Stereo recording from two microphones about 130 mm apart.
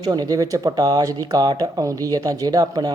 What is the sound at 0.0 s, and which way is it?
Speech, 30° right (ahead or behind).